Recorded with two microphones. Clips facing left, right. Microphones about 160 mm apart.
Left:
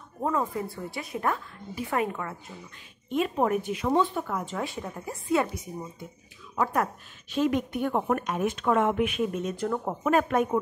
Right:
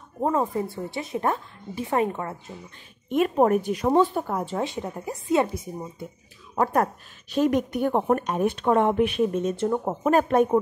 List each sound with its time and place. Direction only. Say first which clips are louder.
0.2 s a woman's voice: right 4 dB; 30° right (ahead or behind)
3.1 s speech: right 5 dB; 50° right (ahead or behind); by 4.6 s 35° right (ahead or behind)
4.6 s a woman's voice: right 4 dB; 20° right (ahead or behind)
6.5 s speech: right 4 dB; 40° right (ahead or behind)